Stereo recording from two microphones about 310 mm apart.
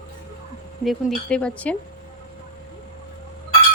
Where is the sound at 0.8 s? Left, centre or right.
Centre.